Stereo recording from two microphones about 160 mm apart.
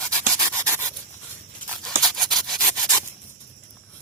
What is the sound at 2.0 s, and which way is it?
Rub, centre (ahead or behind).